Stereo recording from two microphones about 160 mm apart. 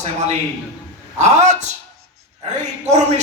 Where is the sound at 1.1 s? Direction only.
45° right (ahead or behind).